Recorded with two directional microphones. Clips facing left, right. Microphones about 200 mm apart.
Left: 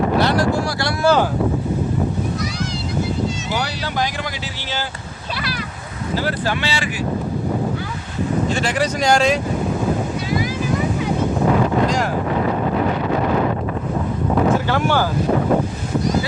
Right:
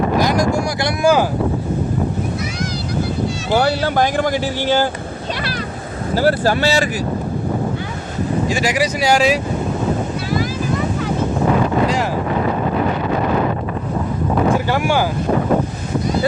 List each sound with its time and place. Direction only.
0.2 s vehicle: 10° right (ahead or behind)
3.5 s speech: 50° right (ahead or behind)
6.1 s speech: 40° right (ahead or behind)
8.4 s speech: 10° right (ahead or behind)
14.7 s speech: 10° right (ahead or behind)